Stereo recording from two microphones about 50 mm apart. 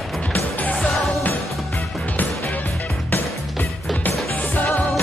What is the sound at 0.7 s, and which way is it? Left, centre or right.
Music, centre.